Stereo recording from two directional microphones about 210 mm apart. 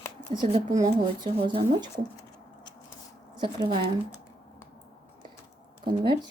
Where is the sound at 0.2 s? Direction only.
20° right (ahead or behind).